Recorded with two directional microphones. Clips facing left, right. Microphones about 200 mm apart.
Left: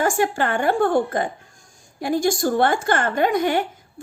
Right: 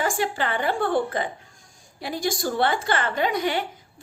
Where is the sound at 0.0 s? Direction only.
50° left (ahead or behind).